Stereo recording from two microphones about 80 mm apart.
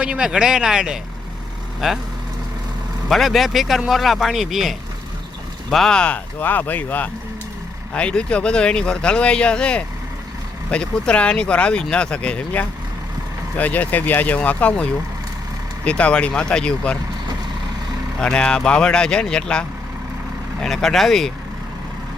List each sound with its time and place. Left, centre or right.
0.0 s speech: centre
3.1 s speech: centre
6.4 s speech: left
18.2 s speech: centre